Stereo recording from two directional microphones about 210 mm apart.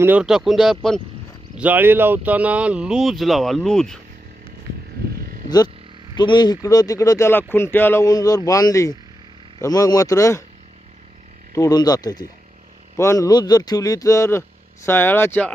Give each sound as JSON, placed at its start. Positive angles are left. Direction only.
{"t": 0.0, "sound": "speech", "side_deg": -5}
{"t": 5.5, "sound": "speech", "side_deg": 20}
{"t": 11.5, "sound": "speech", "side_deg": 15}